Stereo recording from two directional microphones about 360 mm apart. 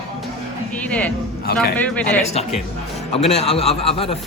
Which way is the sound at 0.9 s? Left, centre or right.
Centre.